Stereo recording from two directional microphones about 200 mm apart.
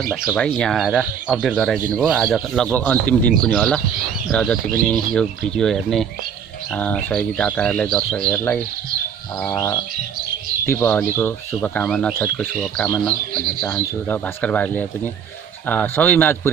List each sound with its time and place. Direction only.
0.1 s speech: 5° right (ahead or behind)
9.6 s speech: 15° left (ahead or behind)